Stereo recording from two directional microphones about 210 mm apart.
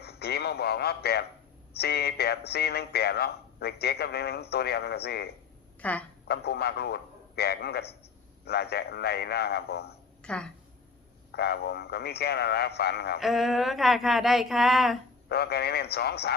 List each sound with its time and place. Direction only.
0.0 s a man's voice: 50° left (ahead or behind)
5.8 s speech: 5° left (ahead or behind)
6.2 s speech: 50° left (ahead or behind)
10.2 s a sound: 5° left (ahead or behind)
11.3 s speech: 50° left (ahead or behind)
13.1 s a sound: centre (ahead or behind)
15.3 s speech: 50° left (ahead or behind)